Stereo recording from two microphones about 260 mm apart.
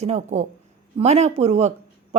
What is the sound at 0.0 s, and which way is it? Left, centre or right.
A woman's voice, right.